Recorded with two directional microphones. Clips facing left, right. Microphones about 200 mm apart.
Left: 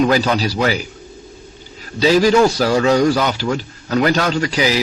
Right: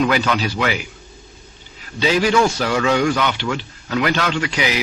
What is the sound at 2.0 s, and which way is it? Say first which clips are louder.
A man's voice: left 4 dB; 40° left (ahead or behind).